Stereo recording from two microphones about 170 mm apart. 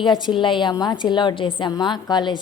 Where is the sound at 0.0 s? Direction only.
25° left (ahead or behind).